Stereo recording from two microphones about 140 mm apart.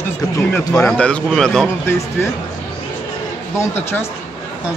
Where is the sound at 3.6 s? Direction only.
15° left (ahead or behind).